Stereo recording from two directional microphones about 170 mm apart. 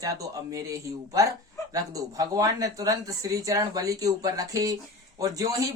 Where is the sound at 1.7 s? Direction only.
20° right (ahead or behind).